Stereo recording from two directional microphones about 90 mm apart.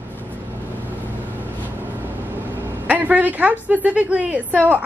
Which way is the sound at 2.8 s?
20° right (ahead or behind).